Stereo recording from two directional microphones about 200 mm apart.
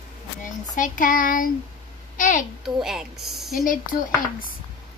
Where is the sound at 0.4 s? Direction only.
40° left (ahead or behind).